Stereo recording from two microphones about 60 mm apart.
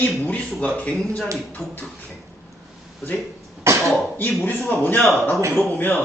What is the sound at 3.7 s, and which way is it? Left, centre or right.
Throat clearing, right.